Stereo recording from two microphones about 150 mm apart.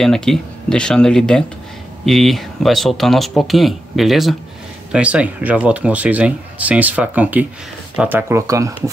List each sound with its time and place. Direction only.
0.0 s speech: 5° left (ahead or behind); by 8.9 s 20° right (ahead or behind)